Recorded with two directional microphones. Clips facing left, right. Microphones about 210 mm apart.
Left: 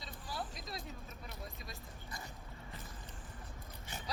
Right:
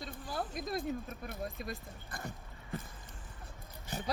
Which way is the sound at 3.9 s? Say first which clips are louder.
Right 8 dB; 40° right (ahead or behind).